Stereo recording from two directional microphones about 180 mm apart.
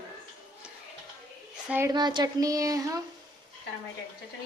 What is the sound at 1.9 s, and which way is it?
A woman's voice, 25° right (ahead or behind).